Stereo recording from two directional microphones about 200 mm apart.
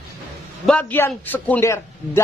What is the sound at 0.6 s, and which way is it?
A man's voice, 10° left (ahead or behind).